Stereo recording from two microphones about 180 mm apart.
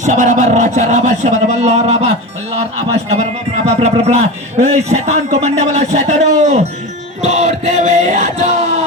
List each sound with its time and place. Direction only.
0.0 s a man's voice: 45° right (ahead or behind)
7.2 s chant: 40° right (ahead or behind)